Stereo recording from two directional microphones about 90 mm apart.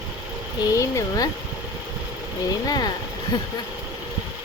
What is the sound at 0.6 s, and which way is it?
Speech, 40° left (ahead or behind).